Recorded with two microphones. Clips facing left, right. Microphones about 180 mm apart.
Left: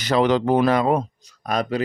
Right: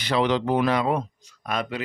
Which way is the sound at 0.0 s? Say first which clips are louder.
Left 4 dB; 45° left (ahead or behind).